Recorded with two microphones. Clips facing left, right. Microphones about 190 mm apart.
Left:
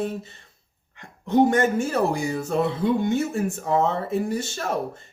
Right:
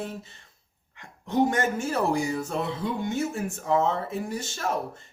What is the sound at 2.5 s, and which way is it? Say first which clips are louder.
Speech: left 7 dB; 60° left (ahead or behind).